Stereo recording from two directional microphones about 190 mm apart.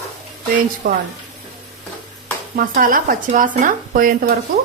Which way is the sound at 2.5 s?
45° right (ahead or behind).